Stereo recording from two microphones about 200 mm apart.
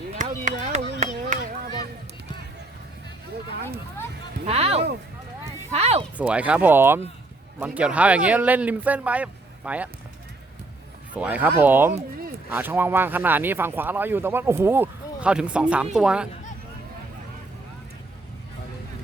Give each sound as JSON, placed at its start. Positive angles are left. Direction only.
{"t": 0.1, "sound": "chop", "side_deg": -40}
{"t": 4.4, "sound": "a sound", "side_deg": -30}
{"t": 5.7, "sound": "speech", "side_deg": -30}
{"t": 6.1, "sound": "speech", "side_deg": -5}
{"t": 11.1, "sound": "speech", "side_deg": -5}